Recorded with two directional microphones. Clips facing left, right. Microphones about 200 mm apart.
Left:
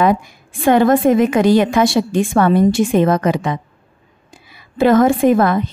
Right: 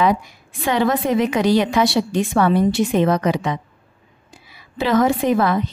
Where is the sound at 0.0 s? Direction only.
50° left (ahead or behind).